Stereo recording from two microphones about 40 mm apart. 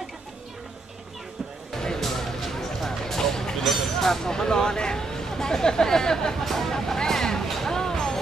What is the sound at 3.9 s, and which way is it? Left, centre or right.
Speech, centre.